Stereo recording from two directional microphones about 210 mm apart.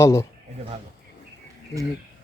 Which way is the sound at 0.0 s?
15° left (ahead or behind).